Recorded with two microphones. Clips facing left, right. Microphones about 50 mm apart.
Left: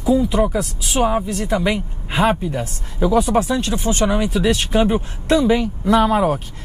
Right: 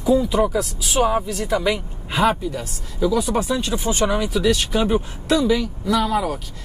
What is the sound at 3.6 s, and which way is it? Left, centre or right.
Speech, centre.